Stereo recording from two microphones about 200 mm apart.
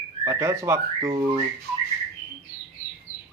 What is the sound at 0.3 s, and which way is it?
Speech, 15° right (ahead or behind).